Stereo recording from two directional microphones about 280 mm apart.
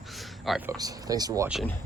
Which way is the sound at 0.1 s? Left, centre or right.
Centre.